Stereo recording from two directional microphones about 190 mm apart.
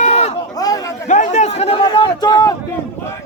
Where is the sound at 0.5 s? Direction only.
20° left (ahead or behind).